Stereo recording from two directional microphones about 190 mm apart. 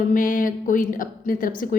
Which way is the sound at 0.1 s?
45° left (ahead or behind).